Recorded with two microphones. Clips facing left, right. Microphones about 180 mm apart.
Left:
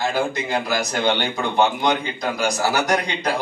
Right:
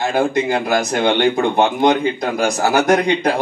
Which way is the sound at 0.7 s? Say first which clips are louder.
Right 5 dB; 55° right (ahead or behind).